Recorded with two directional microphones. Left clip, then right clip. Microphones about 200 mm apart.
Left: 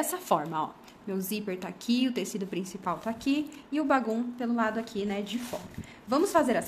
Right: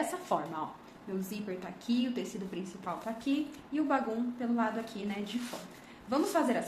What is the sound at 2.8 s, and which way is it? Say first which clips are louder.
A woman's voice: left 5 dB; 60° left (ahead or behind).